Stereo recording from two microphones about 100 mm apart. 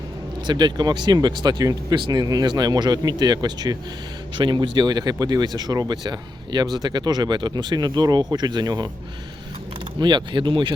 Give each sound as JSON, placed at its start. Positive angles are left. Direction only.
{"t": 0.4, "sound": "speech", "side_deg": -50}
{"t": 10.0, "sound": "speech", "side_deg": -50}